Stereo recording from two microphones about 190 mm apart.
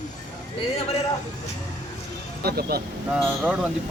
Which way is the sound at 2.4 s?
55° right (ahead or behind).